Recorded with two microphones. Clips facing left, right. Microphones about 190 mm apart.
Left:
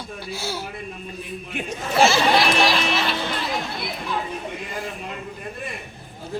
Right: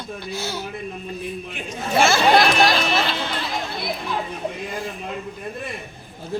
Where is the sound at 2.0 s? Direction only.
50° right (ahead or behind).